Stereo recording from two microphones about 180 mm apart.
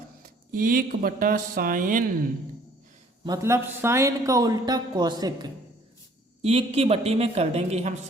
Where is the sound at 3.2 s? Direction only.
20° right (ahead or behind).